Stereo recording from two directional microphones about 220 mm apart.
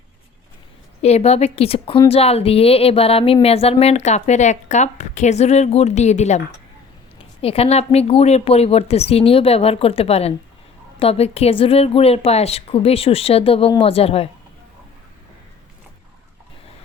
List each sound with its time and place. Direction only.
1.0 s a woman's voice: 30° left (ahead or behind)
7.4 s a woman's voice: 25° left (ahead or behind)